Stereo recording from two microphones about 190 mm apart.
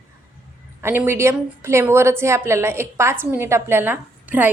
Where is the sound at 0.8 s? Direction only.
10° right (ahead or behind).